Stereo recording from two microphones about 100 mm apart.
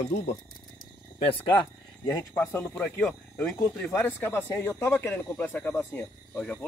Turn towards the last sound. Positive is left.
turn(degrees=15)  # may be behind; listen again after turning